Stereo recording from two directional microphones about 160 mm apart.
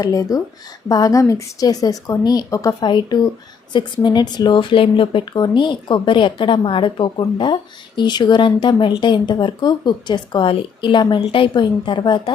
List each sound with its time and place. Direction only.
0.0 s a woman's voice: 20° left (ahead or behind)